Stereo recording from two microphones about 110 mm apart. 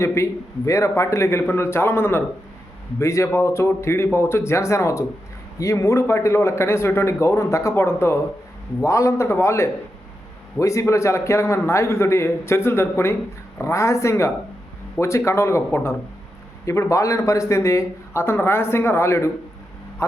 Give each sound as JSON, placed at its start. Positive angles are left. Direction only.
{"t": 0.0, "sound": "speech", "side_deg": 25}